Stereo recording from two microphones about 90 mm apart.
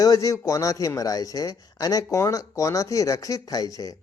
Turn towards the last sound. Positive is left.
turn(degrees=40)  # may be behind; listen again after turning